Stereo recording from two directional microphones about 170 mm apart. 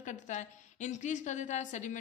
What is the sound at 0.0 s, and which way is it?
A woman's voice, 45° left (ahead or behind).